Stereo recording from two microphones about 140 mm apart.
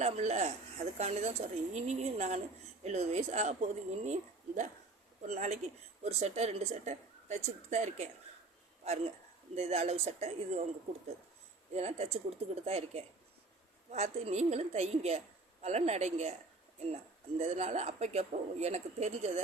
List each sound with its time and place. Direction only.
0.0 s a woman's voice: 55° right (ahead or behind)
9.6 s speech: 50° right (ahead or behind)
11.7 s speech: 50° right (ahead or behind)